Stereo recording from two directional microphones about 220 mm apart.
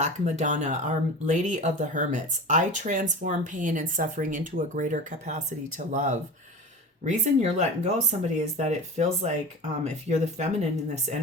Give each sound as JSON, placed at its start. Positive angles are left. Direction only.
{"t": 0.0, "sound": "speech", "side_deg": -30}